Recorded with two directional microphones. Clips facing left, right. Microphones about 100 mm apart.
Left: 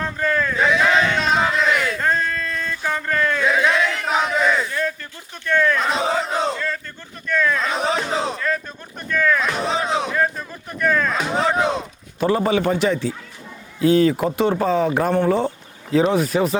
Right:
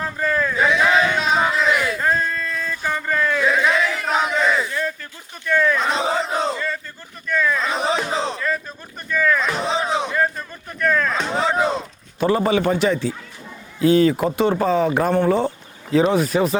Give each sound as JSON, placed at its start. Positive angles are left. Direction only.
{"t": 0.0, "sound": "a sound", "side_deg": -5}
{"t": 5.5, "sound": "speech", "side_deg": -5}
{"t": 9.0, "sound": "music", "side_deg": -5}
{"t": 12.2, "sound": "speech", "side_deg": -25}